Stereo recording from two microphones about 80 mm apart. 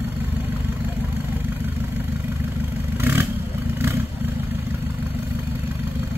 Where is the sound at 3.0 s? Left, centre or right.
Right.